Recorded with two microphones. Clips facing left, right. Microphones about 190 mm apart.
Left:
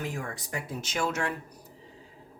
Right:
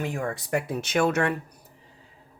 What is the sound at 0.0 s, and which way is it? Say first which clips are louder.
Speech: right 6 dB; 65° right (ahead or behind).